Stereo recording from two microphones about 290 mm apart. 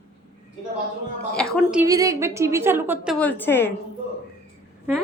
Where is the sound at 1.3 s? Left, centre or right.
Centre.